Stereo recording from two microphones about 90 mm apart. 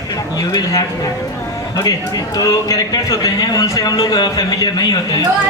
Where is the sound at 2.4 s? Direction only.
45° left (ahead or behind).